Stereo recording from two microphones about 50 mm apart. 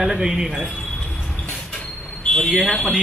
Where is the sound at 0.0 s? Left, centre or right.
Centre.